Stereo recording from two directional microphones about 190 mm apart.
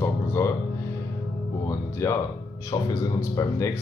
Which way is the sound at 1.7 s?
15° left (ahead or behind).